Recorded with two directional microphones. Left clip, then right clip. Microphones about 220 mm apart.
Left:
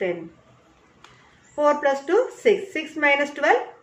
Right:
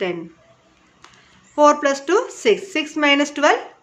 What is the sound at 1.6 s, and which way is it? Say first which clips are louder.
A woman's voice: right 5 dB; 45° right (ahead or behind).